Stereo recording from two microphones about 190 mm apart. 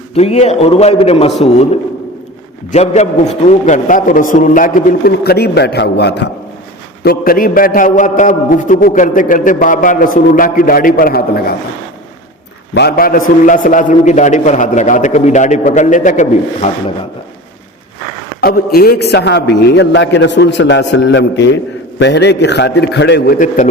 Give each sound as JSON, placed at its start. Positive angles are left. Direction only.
{"t": 0.1, "sound": "a man's voice", "side_deg": 35}
{"t": 2.7, "sound": "a man's voice", "side_deg": 35}
{"t": 7.0, "sound": "a man's voice", "side_deg": 50}
{"t": 12.7, "sound": "a man's voice", "side_deg": 55}
{"t": 18.3, "sound": "a man's voice", "side_deg": 55}